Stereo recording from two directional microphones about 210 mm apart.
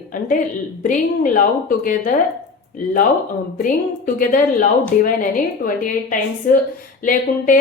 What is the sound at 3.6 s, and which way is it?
A woman's voice, 40° left (ahead or behind).